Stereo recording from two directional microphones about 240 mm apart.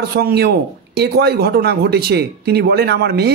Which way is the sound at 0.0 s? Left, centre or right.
Right.